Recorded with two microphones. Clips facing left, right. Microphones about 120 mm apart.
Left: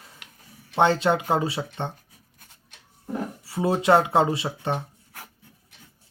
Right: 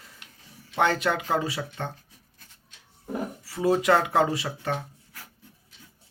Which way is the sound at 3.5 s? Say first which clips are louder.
Left 2 dB; 25° left (ahead or behind).